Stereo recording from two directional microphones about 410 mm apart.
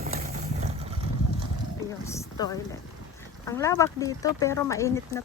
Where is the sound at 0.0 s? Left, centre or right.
Right.